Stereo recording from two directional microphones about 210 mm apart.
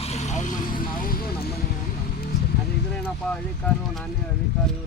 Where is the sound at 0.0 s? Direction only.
30° left (ahead or behind).